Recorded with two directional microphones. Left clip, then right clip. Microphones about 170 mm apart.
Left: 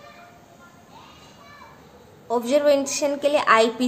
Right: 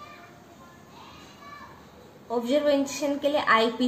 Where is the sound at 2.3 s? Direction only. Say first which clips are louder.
Left 5 dB; 30° left (ahead or behind).